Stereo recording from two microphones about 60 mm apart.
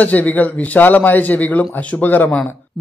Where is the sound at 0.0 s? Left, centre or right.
Left.